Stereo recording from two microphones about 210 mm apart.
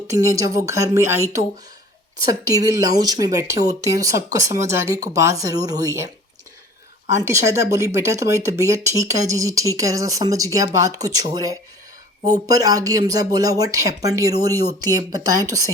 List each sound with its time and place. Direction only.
0.3 s speech: 15° right (ahead or behind)
2.6 s speech: 15° right (ahead or behind)
7.2 s speech: 15° right (ahead or behind)